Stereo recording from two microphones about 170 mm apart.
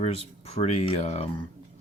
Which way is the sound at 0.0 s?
35° left (ahead or behind).